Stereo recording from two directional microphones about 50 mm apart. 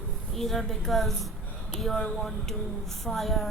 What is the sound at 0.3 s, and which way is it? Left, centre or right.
Speech, centre.